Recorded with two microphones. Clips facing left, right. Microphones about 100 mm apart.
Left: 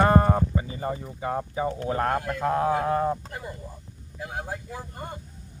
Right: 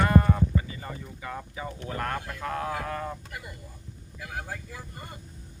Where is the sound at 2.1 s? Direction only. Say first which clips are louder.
Left 7 dB; 45° left (ahead or behind).